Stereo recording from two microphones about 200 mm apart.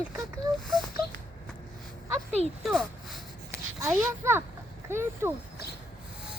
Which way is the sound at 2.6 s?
Centre (ahead or behind).